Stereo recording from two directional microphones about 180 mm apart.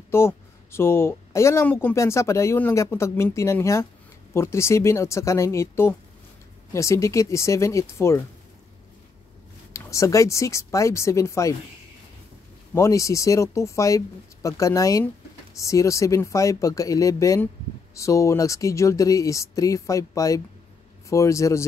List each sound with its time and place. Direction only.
0.1 s speech: 15° left (ahead or behind)
9.7 s speech: 15° left (ahead or behind)
12.7 s speech: 15° left (ahead or behind)